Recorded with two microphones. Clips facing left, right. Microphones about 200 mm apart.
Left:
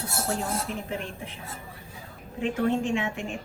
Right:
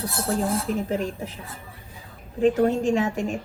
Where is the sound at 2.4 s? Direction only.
40° right (ahead or behind).